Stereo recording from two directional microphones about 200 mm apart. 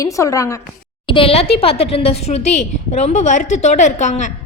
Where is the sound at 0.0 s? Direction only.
15° left (ahead or behind).